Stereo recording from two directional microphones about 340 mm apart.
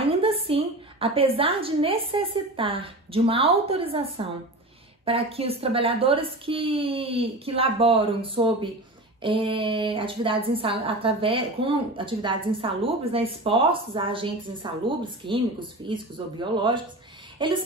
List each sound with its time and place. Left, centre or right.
0.0 s a woman's voice: centre